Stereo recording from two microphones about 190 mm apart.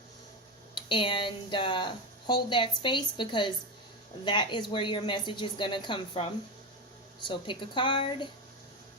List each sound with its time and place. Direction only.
0.7 s speech: 25° left (ahead or behind)